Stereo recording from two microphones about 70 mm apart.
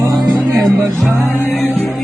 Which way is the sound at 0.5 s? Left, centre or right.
Centre.